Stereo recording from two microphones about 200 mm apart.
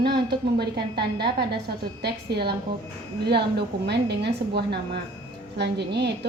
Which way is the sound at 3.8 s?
55° right (ahead or behind).